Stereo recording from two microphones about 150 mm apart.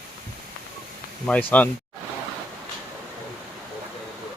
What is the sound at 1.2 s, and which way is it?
Speech, 10° left (ahead or behind).